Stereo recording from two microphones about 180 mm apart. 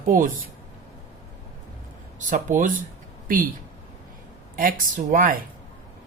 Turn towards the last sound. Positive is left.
turn(degrees=-50)  # may be behind; listen again after turning